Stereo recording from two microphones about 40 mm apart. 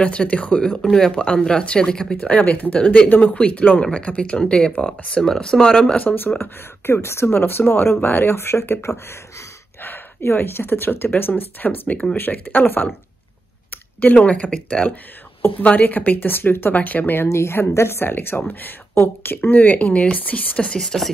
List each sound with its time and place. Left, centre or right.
0.0 s speech: left
0.9 s speech: centre
2.2 s speech: left
3.1 s speech: left
3.3 s speech: left
6.0 s speech: left
8.3 s speech: left
10.2 s speech: left
13.7 s a sound: left
15.6 s speech: left
16.7 s speech: left
17.1 s speech: left
20.5 s speech: left
20.8 s speech: centre